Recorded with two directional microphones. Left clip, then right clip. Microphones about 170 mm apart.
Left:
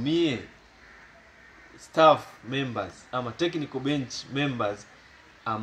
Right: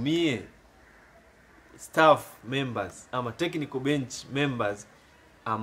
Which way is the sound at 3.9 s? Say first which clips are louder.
Right 2 dB; 45° right (ahead or behind).